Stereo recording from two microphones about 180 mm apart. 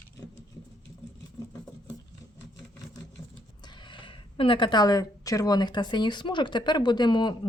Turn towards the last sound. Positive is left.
turn(degrees=25)  # may be behind; listen again after turning